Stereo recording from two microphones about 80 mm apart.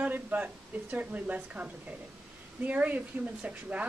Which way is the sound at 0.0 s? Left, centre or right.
Right.